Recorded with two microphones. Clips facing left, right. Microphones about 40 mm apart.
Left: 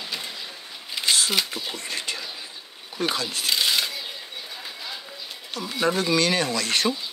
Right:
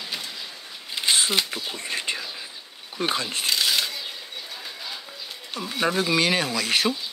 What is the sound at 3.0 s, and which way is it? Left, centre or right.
Speech, right.